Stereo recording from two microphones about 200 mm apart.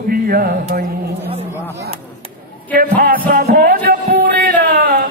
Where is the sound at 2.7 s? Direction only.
45° right (ahead or behind).